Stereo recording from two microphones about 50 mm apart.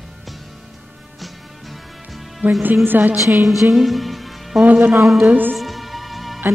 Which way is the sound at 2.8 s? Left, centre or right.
Right.